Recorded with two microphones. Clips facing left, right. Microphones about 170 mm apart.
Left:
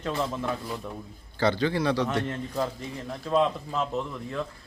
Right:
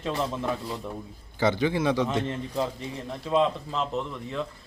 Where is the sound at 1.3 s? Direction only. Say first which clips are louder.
Right 1 dB; 15° right (ahead or behind).